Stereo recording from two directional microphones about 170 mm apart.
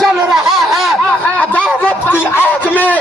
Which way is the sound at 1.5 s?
10° left (ahead or behind).